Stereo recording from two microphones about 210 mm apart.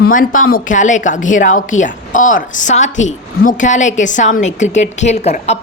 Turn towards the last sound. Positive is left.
turn(degrees=30)  # may be behind; listen again after turning